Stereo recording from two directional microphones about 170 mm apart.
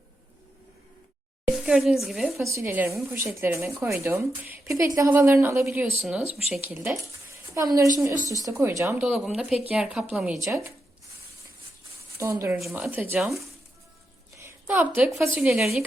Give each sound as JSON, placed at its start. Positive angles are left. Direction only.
{"t": 1.5, "sound": "speech", "side_deg": -5}
{"t": 2.4, "sound": "a woman's voice", "side_deg": -15}
{"t": 10.4, "sound": "speech", "side_deg": -15}
{"t": 12.1, "sound": "speech", "side_deg": -15}
{"t": 12.5, "sound": "speech", "side_deg": 0}
{"t": 14.3, "sound": "a sound", "side_deg": -15}
{"t": 15.1, "sound": "speech", "side_deg": 0}